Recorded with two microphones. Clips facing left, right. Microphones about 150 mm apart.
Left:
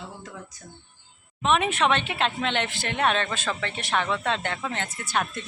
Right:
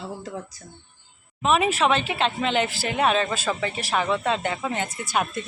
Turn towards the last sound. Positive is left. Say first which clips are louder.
# right 3 dB
turn(degrees=-10)  # may be behind; listen again after turning